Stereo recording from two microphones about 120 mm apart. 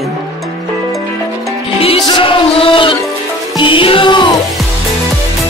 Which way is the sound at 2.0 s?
45° left (ahead or behind).